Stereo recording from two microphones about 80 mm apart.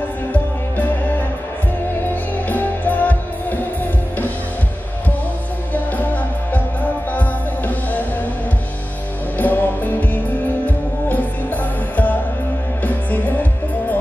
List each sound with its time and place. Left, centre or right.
0.3 s music: centre
2.5 s music: left
6.5 s music: centre
9.4 s music: left
11.1 s music: left